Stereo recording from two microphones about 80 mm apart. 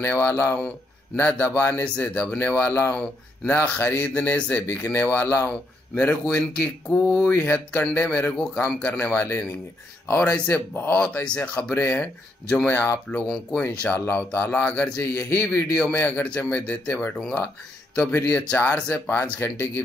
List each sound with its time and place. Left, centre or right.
0.0 s speech: left
2.0 s speech: left
5.9 s speech: centre
7.2 s speech: left
11.2 s speech: centre
13.9 s speech: left
14.4 s speech: left
18.1 s speech: left
18.9 s speech: centre
19.4 s speech: left